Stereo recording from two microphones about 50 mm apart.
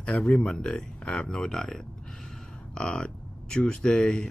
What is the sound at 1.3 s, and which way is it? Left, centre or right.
Speech, centre.